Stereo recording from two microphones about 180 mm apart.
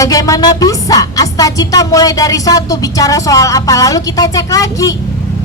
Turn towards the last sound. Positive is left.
turn(degrees=20)  # may be behind; listen again after turning